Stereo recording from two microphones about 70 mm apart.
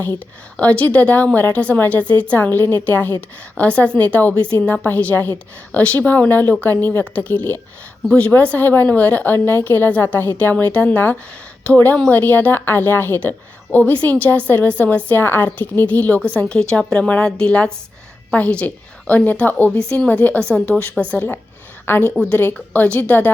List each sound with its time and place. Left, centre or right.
0.5 s a woman's voice: centre
3.6 s a woman's voice: centre
15.1 s a woman's voice: left
21.8 s a woman's voice: left